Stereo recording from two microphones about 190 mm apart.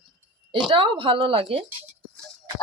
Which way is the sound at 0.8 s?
30° right (ahead or behind).